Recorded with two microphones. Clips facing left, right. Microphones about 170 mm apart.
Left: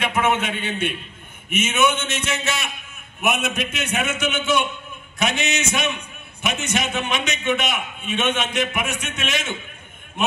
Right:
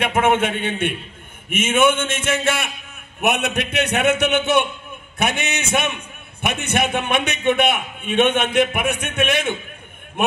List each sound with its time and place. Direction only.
0.0 s a man's voice: 55° right (ahead or behind)